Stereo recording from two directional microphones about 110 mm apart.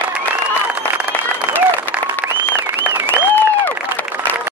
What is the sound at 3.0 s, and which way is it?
Applause, 15° left (ahead or behind).